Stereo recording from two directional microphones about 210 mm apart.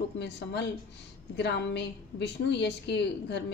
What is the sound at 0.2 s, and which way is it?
A woman's voice, 55° left (ahead or behind).